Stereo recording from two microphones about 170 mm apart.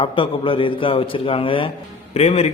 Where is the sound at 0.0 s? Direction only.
30° left (ahead or behind).